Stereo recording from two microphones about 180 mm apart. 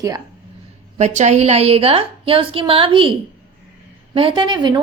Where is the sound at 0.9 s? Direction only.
40° right (ahead or behind).